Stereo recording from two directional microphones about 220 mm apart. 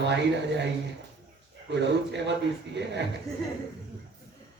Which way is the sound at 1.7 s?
50° right (ahead or behind).